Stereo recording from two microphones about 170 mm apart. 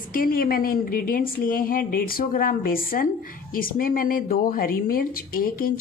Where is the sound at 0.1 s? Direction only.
55° left (ahead or behind).